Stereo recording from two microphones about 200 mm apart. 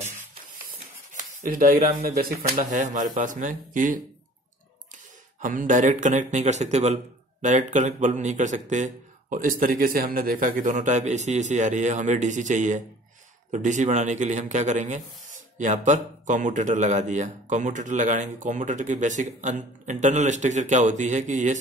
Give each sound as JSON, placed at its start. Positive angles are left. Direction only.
{"t": 1.1, "sound": "speech", "side_deg": -45}
{"t": 5.4, "sound": "speech", "side_deg": -40}